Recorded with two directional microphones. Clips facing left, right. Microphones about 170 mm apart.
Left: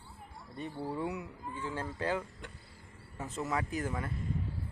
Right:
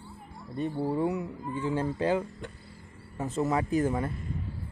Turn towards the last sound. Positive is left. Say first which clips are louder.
# right 9 dB
turn(degrees=-30)  # may be behind; listen again after turning